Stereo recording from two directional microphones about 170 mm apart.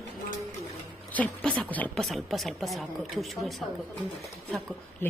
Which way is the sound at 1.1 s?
10° left (ahead or behind).